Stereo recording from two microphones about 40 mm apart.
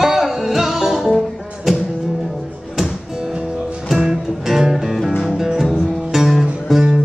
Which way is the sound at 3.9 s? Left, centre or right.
Centre.